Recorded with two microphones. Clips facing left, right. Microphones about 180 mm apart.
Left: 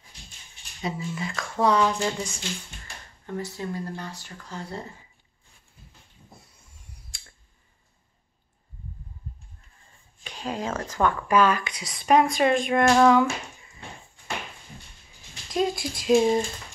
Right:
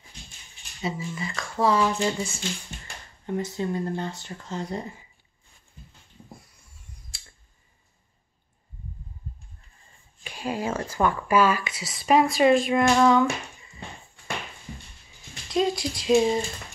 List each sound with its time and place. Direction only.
0.8 s speech: centre (ahead or behind)
3.3 s speech: 20° right (ahead or behind)
7.1 s clicking: centre (ahead or behind)
10.2 s speech: 10° right (ahead or behind)
15.5 s speech: centre (ahead or behind)